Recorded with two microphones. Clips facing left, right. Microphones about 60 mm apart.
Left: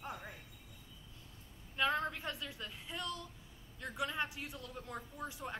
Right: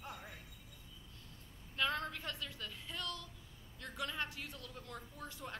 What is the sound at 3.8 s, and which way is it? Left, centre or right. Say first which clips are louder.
A man's voice: left 3 dB; centre.